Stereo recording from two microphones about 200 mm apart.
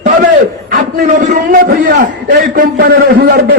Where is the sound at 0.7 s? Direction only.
40° right (ahead or behind).